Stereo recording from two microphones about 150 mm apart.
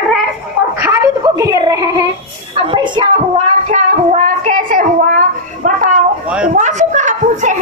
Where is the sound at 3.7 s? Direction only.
55° right (ahead or behind).